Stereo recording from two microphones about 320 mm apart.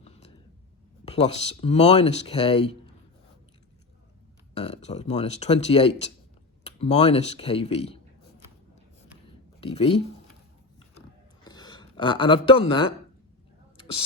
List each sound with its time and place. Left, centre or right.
0.0 s a sound: centre
1.0 s speech: centre
4.5 s speech: centre
9.6 s speech: centre
11.4 s speech: centre